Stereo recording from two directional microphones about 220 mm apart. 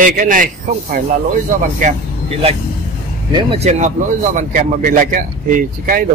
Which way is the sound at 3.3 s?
25° right (ahead or behind).